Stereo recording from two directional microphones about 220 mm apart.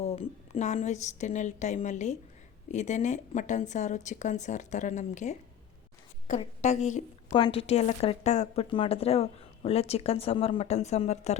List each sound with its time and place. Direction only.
0.0 s a woman's voice: 25° left (ahead or behind)
7.3 s speech: 20° left (ahead or behind)